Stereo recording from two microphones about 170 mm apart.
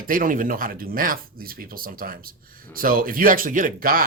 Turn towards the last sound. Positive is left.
turn(degrees=-55)  # may be behind; listen again after turning